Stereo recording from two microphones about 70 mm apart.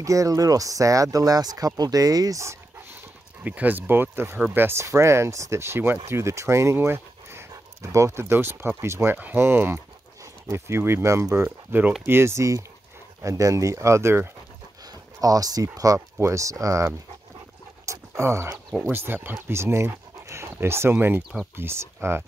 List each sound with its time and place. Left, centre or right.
0.0 s speech: right
3.4 s speech: right
11.4 s speech: right
12.1 s speech: right
15.1 s speech: right
16.2 s speech: right
17.8 s pant: right
18.8 s speech: right